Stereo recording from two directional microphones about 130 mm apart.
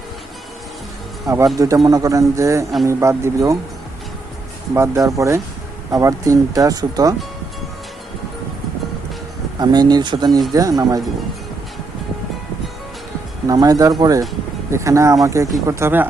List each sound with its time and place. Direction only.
1.5 s speech: 25° right (ahead or behind)
4.7 s speech: 25° right (ahead or behind)
9.6 s speech: 30° right (ahead or behind)
13.5 s speech: 30° right (ahead or behind)